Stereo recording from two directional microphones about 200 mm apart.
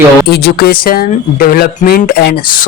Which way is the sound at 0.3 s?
50° left (ahead or behind).